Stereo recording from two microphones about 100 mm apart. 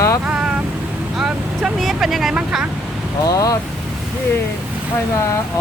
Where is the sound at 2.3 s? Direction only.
5° right (ahead or behind).